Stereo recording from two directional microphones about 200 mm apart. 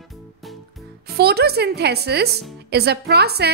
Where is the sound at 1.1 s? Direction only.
55° right (ahead or behind).